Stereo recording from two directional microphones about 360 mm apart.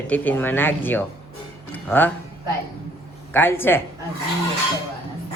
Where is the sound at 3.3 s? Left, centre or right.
Centre.